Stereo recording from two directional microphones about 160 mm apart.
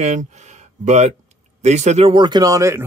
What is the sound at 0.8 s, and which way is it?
A man's voice, 45° right (ahead or behind).